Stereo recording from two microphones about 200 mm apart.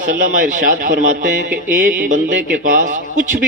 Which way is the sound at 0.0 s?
40° right (ahead or behind).